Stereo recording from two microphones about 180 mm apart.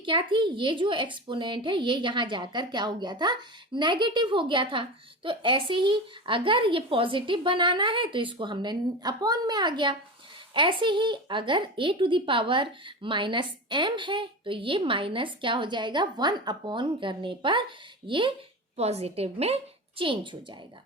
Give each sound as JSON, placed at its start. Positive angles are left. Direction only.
{"t": 0.0, "sound": "a woman's voice", "side_deg": -25}